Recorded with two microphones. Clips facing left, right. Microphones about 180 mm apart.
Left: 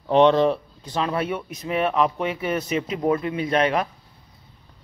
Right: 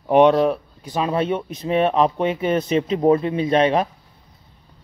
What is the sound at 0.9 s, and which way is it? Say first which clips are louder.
Speech: right 4 dB; 20° right (ahead or behind).